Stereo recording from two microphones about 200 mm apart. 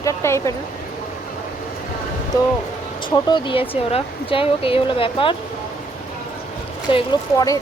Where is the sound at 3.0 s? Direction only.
25° left (ahead or behind).